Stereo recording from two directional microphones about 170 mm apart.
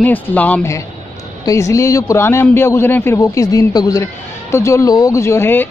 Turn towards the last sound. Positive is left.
turn(degrees=10)  # may be behind; listen again after turning